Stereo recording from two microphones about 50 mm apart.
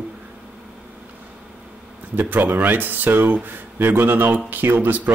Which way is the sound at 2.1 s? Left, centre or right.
Right.